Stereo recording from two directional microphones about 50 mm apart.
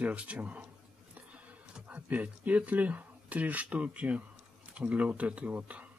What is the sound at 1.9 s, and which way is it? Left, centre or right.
Speech, right.